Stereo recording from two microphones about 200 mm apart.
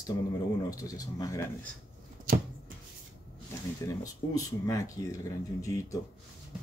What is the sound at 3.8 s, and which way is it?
Speech, 15° left (ahead or behind).